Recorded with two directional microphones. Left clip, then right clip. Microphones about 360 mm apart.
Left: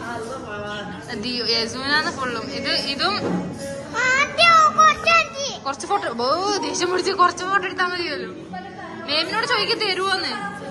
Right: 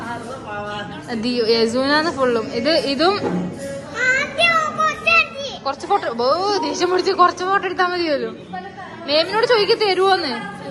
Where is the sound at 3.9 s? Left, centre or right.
Centre.